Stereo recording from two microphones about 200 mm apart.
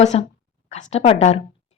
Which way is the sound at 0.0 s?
35° left (ahead or behind).